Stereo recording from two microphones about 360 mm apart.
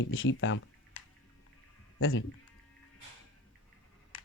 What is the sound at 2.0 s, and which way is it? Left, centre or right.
Speech, left.